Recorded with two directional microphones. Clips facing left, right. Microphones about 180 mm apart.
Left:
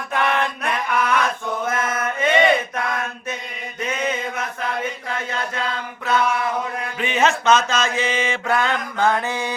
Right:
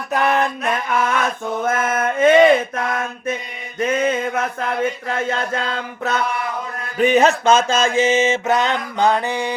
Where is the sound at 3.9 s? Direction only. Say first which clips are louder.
Right 6 dB; 50° right (ahead or behind).